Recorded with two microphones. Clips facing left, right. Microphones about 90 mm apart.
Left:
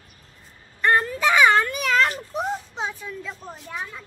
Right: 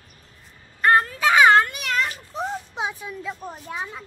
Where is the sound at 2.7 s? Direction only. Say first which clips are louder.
Right 1 dB; 10° right (ahead or behind).